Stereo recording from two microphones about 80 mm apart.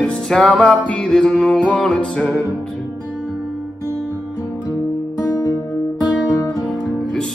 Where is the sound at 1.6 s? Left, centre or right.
Centre.